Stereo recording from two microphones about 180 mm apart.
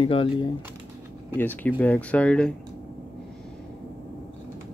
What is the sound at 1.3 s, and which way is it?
Speech, 10° left (ahead or behind).